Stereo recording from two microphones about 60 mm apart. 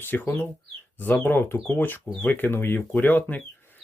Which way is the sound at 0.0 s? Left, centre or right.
Left.